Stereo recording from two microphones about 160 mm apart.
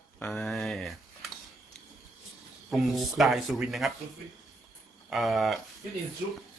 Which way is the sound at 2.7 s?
Centre (ahead or behind).